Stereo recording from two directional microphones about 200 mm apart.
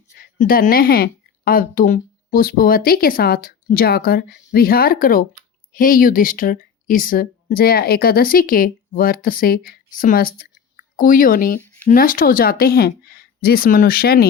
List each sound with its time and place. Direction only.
0.2 s a woman's voice: 45° left (ahead or behind)